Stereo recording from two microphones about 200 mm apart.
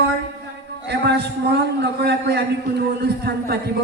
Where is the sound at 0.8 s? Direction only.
55° right (ahead or behind).